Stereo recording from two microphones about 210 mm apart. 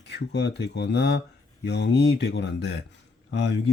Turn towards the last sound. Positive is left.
turn(degrees=55)  # may be behind; listen again after turning